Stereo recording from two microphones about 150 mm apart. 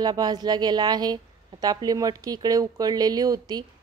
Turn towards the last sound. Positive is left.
turn(degrees=-25)  # may be behind; listen again after turning